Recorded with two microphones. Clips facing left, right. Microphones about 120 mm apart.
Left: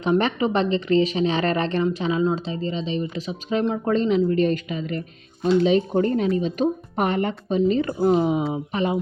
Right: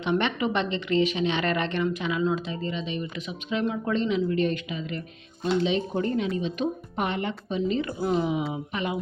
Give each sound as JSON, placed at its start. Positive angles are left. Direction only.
{"t": 0.0, "sound": "speech", "side_deg": 40}